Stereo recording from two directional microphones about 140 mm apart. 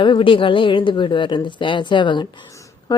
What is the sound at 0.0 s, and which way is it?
Speech, 35° left (ahead or behind).